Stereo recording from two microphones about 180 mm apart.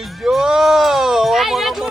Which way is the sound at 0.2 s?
Centre (ahead or behind).